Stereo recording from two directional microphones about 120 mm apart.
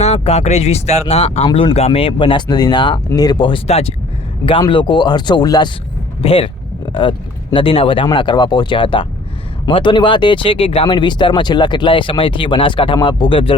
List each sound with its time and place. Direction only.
0.0 s speech: 65° left (ahead or behind); by 3.6 s 40° left (ahead or behind)
3.7 s speech: 55° left (ahead or behind)
4.7 s speech: 40° left (ahead or behind)
6.2 s speech: 50° left (ahead or behind)